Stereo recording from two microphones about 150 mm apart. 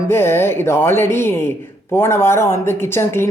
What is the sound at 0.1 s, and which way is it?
Speech, 15° left (ahead or behind).